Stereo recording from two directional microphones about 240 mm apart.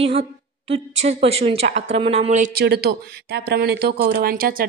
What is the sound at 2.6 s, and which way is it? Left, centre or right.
Speech, right.